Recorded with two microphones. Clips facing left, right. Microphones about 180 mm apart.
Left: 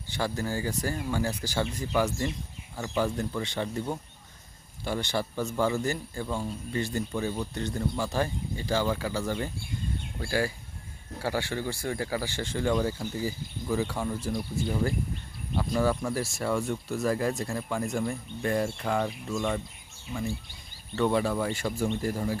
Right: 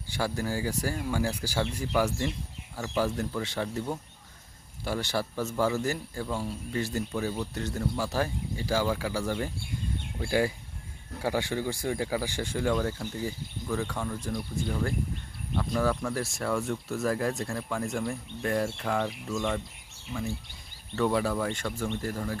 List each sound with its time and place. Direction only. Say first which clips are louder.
0.1 s speech: even; 10° right (ahead or behind)
2.7 s speech: even; 5° right (ahead or behind)
4.8 s speech: even; 5° right (ahead or behind)
20.9 s speech: left 1 dB; centre (ahead or behind)